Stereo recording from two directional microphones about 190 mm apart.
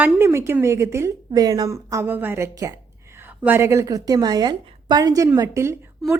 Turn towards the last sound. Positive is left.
turn(degrees=-15)  # may be behind; listen again after turning